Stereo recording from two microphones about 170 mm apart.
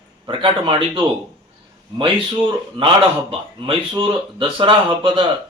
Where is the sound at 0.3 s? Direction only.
30° right (ahead or behind).